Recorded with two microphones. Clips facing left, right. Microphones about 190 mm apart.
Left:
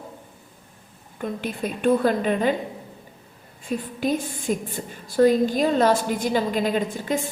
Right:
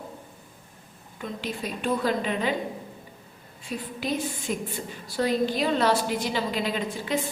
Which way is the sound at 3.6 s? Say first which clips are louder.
Left 6 dB; 50° left (ahead or behind).